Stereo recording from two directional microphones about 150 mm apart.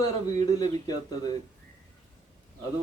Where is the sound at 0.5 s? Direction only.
25° left (ahead or behind).